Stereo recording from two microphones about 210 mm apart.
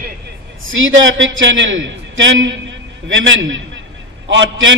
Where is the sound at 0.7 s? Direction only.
65° right (ahead or behind).